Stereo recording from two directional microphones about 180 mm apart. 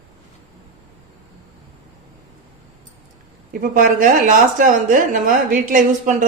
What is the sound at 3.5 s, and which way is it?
A woman's voice, 50° right (ahead or behind).